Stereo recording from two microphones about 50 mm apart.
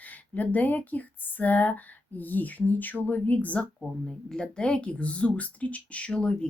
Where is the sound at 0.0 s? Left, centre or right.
Left.